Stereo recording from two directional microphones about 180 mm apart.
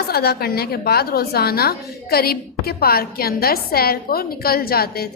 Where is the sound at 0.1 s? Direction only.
60° left (ahead or behind).